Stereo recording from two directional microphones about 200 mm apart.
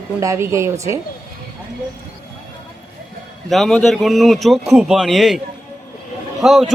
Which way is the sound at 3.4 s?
Centre (ahead or behind).